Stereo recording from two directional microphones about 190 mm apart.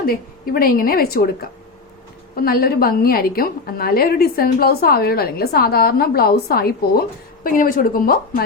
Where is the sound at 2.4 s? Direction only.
55° left (ahead or behind).